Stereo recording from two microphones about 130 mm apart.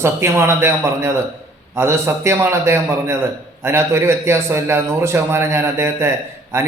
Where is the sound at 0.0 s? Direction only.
20° right (ahead or behind).